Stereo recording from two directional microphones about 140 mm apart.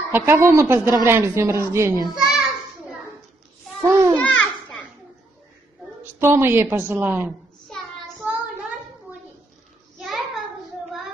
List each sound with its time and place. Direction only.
0.1 s a woman's voice: 15° right (ahead or behind)
2.0 s a sound: 5° right (ahead or behind)
3.8 s babbling: 20° right (ahead or behind)
4.2 s children playing: 10° left (ahead or behind)
6.1 s a woman's voice: 15° right (ahead or behind)
9.9 s child singing: centre (ahead or behind)